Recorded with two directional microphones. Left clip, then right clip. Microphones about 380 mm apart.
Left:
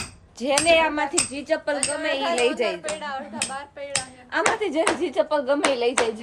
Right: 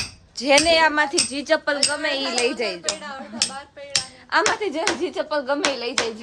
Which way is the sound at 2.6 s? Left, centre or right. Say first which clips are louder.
Even; left.